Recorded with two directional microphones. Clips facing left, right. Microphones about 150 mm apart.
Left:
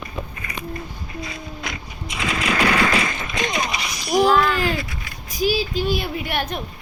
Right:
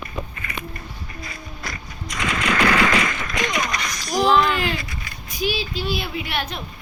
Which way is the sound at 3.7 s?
10° left (ahead or behind).